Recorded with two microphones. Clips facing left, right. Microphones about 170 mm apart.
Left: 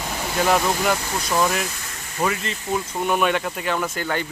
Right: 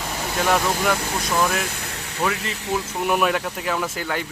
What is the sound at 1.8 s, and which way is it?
Vehicle, 65° right (ahead or behind).